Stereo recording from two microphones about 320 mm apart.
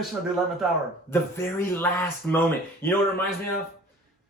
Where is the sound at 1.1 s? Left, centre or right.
Centre.